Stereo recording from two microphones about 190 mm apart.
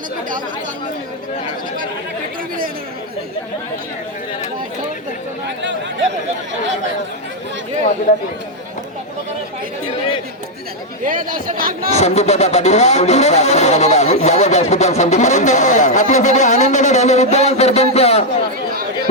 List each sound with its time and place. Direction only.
11.0 s speech: 45° right (ahead or behind)
11.9 s speech: 35° left (ahead or behind)